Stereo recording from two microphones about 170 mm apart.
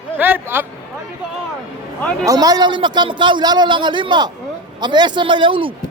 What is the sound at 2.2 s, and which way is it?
A man's voice, 20° right (ahead or behind).